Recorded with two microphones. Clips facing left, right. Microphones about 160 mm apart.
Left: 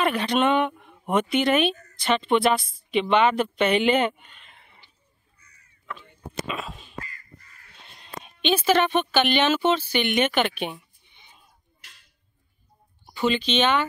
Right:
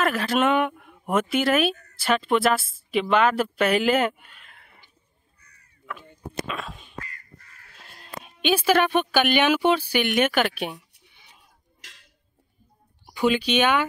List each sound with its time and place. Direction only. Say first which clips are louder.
0.0 s speech: even; centre (ahead or behind)
5.4 s crow: right 1 dB; 60° right (ahead or behind)
5.9 s speech: right 1 dB; 10° right (ahead or behind)
6.4 s speech: left 1 dB; centre (ahead or behind)
7.1 s crow: even; 65° right (ahead or behind)
7.7 s a woman's voice: even; 5° right (ahead or behind)
11.8 s a sound: right 3 dB; 90° right
13.0 s speech: right 2 dB; 10° right (ahead or behind)